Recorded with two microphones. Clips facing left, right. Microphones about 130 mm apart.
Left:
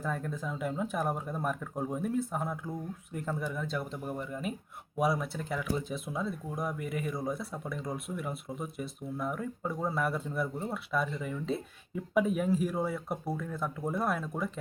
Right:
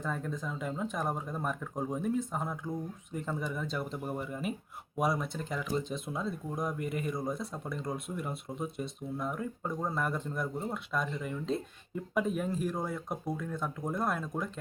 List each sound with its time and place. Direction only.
0.0 s speech: 5° left (ahead or behind)